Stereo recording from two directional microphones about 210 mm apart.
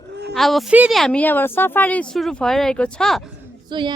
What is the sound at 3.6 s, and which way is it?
Speech, 20° right (ahead or behind).